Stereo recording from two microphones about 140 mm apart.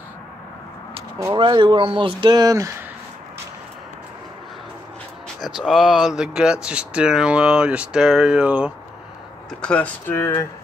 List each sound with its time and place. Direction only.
1.2 s speech: 35° right (ahead or behind)
5.4 s speech: centre (ahead or behind)
9.6 s speech: 10° left (ahead or behind)